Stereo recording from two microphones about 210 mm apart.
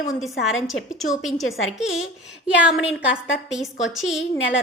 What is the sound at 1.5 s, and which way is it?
Speech, 65° left (ahead or behind).